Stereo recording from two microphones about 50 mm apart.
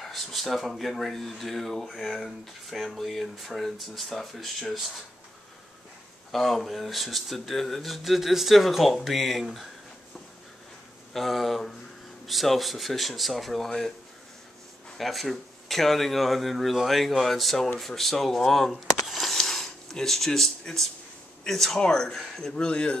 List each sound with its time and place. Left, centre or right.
0.0 s speech: centre
6.3 s speech: centre
11.1 s speech: centre
15.0 s speech: centre